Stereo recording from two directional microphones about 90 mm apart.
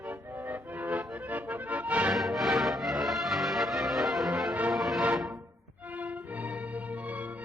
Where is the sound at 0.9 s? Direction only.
15° right (ahead or behind).